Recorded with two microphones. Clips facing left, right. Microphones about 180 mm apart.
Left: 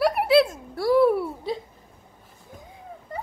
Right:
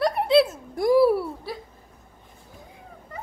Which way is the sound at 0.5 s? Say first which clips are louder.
Right 1 dB; 10° right (ahead or behind).